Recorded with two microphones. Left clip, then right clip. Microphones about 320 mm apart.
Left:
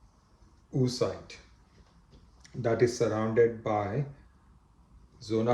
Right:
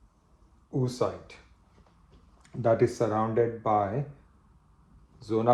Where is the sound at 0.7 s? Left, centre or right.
Centre.